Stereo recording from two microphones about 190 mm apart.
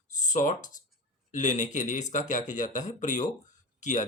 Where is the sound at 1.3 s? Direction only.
40° left (ahead or behind).